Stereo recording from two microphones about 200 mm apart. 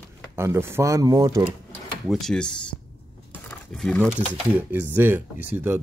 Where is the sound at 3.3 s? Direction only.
5° left (ahead or behind).